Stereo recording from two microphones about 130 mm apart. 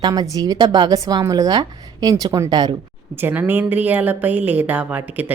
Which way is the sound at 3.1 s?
15° right (ahead or behind).